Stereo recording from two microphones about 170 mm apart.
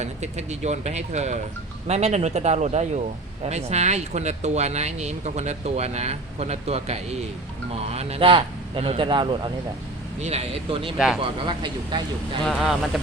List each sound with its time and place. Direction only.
0.0 s speech: 40° right (ahead or behind)
10.2 s speech: 40° right (ahead or behind)
10.9 s speech: 5° right (ahead or behind)
11.2 s speech: 30° right (ahead or behind)
12.5 s speech: centre (ahead or behind)